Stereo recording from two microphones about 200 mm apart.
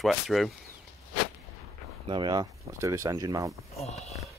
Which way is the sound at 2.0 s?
20° right (ahead or behind).